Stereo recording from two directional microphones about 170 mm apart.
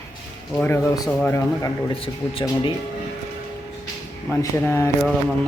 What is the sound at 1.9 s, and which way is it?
Speech, 35° left (ahead or behind).